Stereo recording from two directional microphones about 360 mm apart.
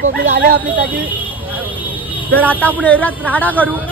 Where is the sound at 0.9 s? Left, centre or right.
Centre.